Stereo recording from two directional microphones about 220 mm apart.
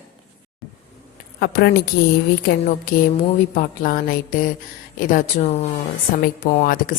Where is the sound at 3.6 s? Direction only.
40° left (ahead or behind).